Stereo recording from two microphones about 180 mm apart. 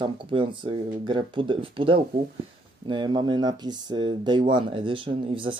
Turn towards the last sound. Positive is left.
turn(degrees=-30)  # may be behind; listen again after turning